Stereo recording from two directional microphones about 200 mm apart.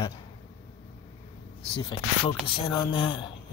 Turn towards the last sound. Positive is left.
turn(degrees=25)  # may be behind; listen again after turning